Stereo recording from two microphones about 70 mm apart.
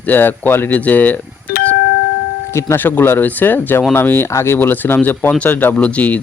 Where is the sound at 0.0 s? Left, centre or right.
Left.